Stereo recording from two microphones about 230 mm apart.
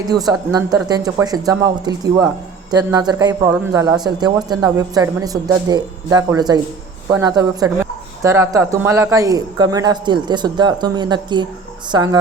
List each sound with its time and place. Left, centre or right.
0.1 s speech: centre